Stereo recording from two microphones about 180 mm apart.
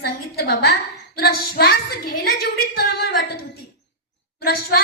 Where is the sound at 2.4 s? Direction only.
60° left (ahead or behind).